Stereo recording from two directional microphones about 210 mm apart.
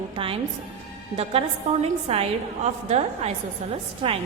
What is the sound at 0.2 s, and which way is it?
A woman's voice, 25° right (ahead or behind).